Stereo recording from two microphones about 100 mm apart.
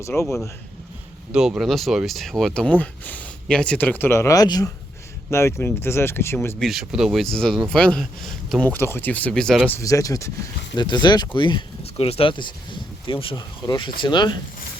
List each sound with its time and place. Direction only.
0.0 s speech: 30° left (ahead or behind)
1.3 s speech: 5° right (ahead or behind); by 4.4 s 30° left (ahead or behind)
4.4 s speech: 40° left (ahead or behind)
5.3 s speech: 25° left (ahead or behind)
6.6 s speech: centre (ahead or behind)
8.6 s speech: 20° left (ahead or behind)
9.8 s speech: 35° left (ahead or behind)
10.8 s speech: 50° left (ahead or behind)
11.8 s speech: 80° left; by 14.3 s 50° left (ahead or behind)